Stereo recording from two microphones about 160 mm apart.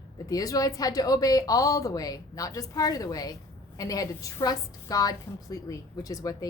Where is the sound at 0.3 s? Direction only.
20° left (ahead or behind).